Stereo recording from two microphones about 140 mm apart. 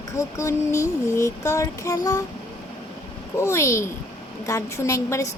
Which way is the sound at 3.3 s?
20° left (ahead or behind).